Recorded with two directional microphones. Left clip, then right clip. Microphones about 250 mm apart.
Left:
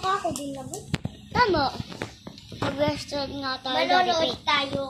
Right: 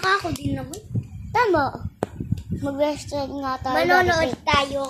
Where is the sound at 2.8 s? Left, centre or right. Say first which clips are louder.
Right 4 dB; right.